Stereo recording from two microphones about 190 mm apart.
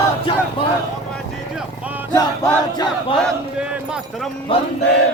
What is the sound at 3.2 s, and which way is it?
A man's voice, 5° right (ahead or behind).